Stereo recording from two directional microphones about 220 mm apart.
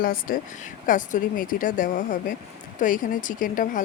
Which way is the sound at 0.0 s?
40° left (ahead or behind).